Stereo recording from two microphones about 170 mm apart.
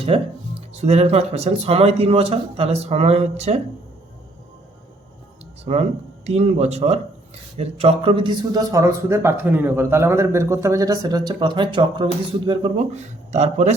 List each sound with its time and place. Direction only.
0.1 s speech: 35° right (ahead or behind)
5.7 s speech: 35° right (ahead or behind)
12.9 s speech: 40° right (ahead or behind)